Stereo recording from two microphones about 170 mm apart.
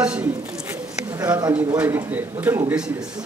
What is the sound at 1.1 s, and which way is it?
A man's voice, 20° right (ahead or behind).